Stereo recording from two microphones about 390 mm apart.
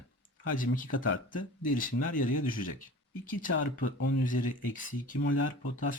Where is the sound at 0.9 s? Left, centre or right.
Left.